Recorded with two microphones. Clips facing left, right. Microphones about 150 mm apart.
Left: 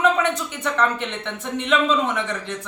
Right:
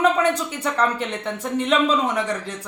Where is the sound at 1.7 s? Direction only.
40° right (ahead or behind).